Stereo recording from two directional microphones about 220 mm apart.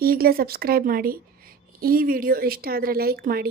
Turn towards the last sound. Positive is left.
turn(degrees=-45)  # may be behind; listen again after turning